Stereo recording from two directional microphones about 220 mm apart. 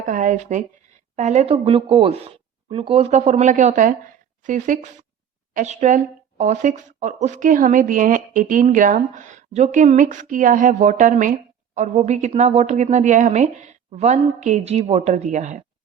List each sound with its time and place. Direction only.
0.0 s speech: 35° right (ahead or behind)